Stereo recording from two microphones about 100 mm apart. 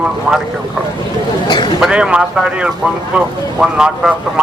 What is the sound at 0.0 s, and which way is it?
Speech, 5° right (ahead or behind).